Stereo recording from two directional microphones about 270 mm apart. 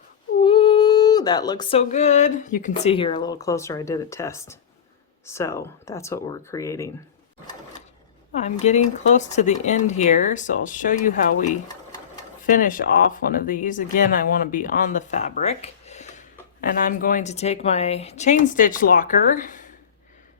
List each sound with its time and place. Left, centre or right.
0.4 s a sound: centre
5.2 s speech: centre
8.3 s speech: left